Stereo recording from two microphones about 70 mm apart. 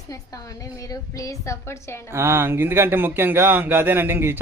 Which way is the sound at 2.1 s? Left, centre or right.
Right.